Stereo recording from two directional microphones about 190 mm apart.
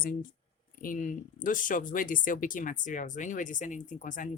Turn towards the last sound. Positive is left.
turn(degrees=40)  # may be behind; listen again after turning